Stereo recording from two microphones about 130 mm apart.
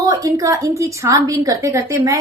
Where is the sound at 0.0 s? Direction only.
25° right (ahead or behind).